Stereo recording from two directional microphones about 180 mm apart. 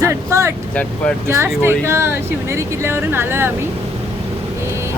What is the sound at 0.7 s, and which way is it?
Speech, 5° left (ahead or behind).